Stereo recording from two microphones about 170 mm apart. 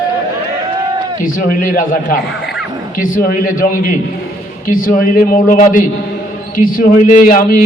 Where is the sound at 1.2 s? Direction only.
55° left (ahead or behind).